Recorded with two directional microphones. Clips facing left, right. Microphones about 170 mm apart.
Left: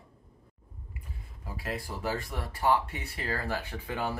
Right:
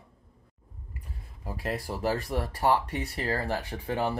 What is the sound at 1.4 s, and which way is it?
Speech, 40° right (ahead or behind).